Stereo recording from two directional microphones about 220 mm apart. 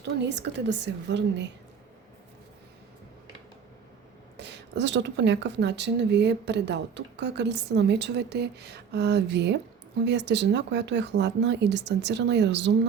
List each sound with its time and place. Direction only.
0.0 s a woman's voice: 50° right (ahead or behind)
4.4 s a woman's voice: 50° right (ahead or behind)